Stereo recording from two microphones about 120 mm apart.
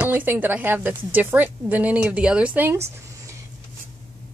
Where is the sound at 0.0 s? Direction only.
15° right (ahead or behind).